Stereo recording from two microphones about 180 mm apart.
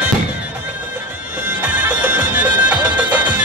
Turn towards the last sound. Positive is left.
turn(degrees=-10)  # may be behind; listen again after turning